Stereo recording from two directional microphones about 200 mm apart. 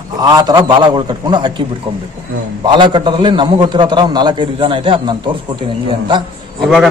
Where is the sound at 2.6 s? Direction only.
25° right (ahead or behind).